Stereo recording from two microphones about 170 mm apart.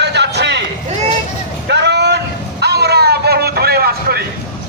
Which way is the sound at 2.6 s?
70° right (ahead or behind).